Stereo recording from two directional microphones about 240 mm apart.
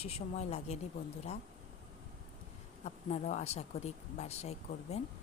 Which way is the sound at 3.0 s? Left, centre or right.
Left.